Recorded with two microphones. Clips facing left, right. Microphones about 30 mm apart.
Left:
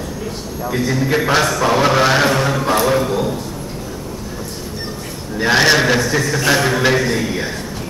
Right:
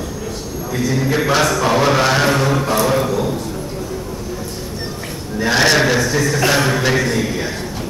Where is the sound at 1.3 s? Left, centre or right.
Centre.